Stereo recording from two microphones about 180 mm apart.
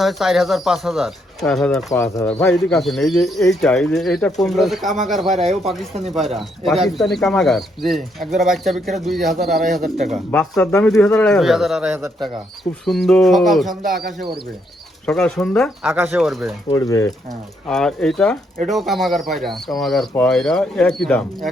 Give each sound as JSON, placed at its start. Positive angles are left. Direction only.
{"t": 0.0, "sound": "speech", "side_deg": 0}
{"t": 1.9, "sound": "speech", "side_deg": 20}
{"t": 2.4, "sound": "speech", "side_deg": 0}
{"t": 10.5, "sound": "speech", "side_deg": 10}
{"t": 12.8, "sound": "speech", "side_deg": 0}
{"t": 15.0, "sound": "speech", "side_deg": 5}
{"t": 16.6, "sound": "speech", "side_deg": 20}
{"t": 17.7, "sound": "speech", "side_deg": 5}